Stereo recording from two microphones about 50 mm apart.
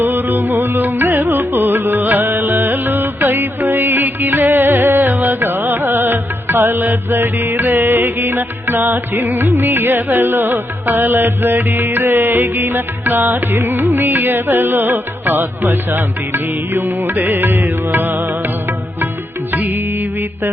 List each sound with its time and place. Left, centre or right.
0.0 s music: right
19.5 s music: right